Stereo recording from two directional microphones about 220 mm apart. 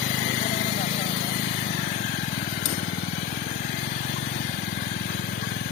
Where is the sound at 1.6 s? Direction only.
35° left (ahead or behind).